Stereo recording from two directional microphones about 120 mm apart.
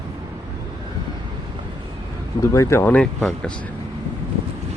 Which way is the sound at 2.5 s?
25° left (ahead or behind).